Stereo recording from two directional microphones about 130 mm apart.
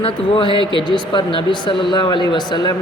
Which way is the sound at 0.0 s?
40° left (ahead or behind).